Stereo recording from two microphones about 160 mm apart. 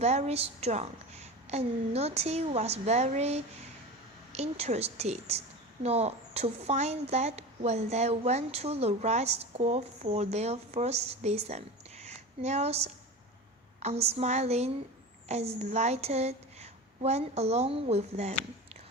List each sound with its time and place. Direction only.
0.0 s a woman's voice: 45° right (ahead or behind)